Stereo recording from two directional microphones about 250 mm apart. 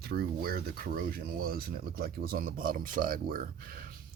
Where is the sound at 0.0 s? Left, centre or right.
Right.